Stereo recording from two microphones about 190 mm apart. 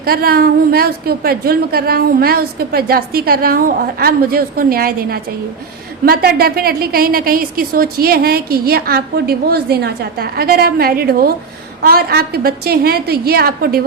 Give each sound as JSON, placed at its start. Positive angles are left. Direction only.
{"t": 0.0, "sound": "a woman's voice", "side_deg": -50}